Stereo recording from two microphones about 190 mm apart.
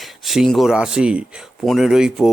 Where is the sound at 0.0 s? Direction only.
Centre (ahead or behind).